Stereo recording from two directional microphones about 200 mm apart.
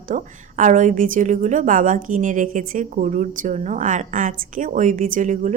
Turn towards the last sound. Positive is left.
turn(degrees=-40)  # may be behind; listen again after turning